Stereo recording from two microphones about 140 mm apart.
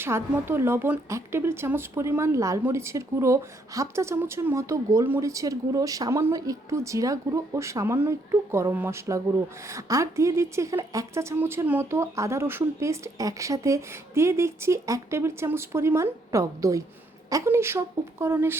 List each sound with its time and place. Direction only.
0.0 s a woman's voice: 15° right (ahead or behind)